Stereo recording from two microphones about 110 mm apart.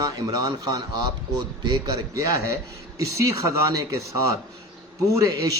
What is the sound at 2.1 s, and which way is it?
A man's voice, 30° right (ahead or behind).